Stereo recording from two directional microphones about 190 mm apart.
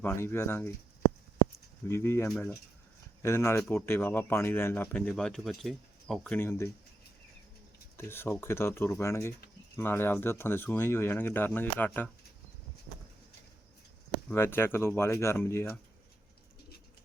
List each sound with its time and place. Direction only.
0.0 s speech: 10° left (ahead or behind)
1.9 s speech: 15° left (ahead or behind)
7.9 s speech: 10° left (ahead or behind)
14.3 s speech: 10° left (ahead or behind)